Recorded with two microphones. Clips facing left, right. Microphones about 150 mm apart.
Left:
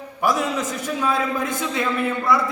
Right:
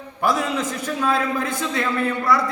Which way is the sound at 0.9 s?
Centre (ahead or behind).